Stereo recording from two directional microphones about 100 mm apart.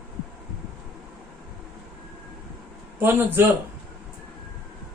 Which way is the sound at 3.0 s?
20° right (ahead or behind).